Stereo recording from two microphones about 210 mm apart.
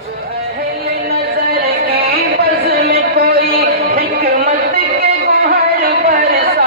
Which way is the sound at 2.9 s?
45° right (ahead or behind).